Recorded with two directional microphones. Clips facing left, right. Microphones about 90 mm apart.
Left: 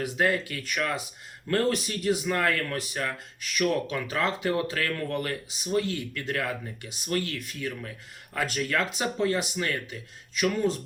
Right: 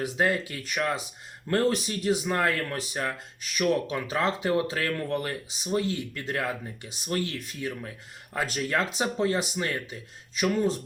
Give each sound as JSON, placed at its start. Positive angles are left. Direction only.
{"t": 0.0, "sound": "speech", "side_deg": -25}